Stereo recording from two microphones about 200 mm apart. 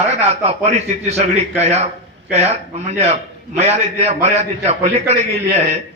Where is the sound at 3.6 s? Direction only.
30° right (ahead or behind).